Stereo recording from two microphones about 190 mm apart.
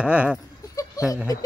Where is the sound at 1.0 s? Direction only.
20° left (ahead or behind).